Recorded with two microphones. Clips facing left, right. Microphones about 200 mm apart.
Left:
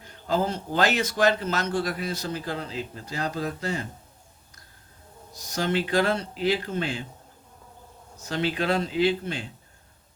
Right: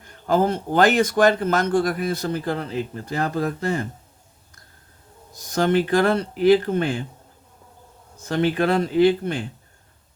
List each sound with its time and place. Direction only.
0.0 s a man's voice: 50° right (ahead or behind)
5.5 s a man's voice: 55° right (ahead or behind)
8.3 s a man's voice: 55° right (ahead or behind)